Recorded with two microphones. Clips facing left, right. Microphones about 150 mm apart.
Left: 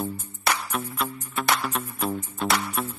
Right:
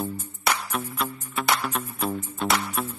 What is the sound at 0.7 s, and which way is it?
Music, 5° right (ahead or behind).